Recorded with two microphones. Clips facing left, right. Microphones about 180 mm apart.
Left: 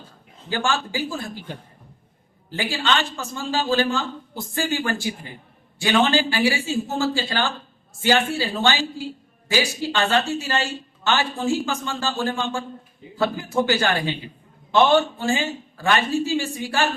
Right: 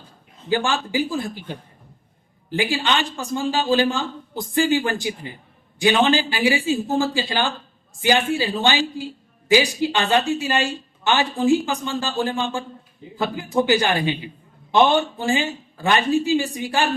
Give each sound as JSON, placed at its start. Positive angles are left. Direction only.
{"t": 0.5, "sound": "speech", "side_deg": -15}
{"t": 2.5, "sound": "speech", "side_deg": -15}